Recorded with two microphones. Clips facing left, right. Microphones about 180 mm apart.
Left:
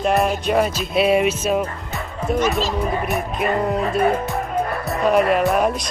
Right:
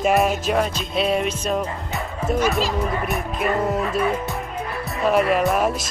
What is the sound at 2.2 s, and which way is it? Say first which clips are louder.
Music: left 1 dB; 5° right (ahead or behind).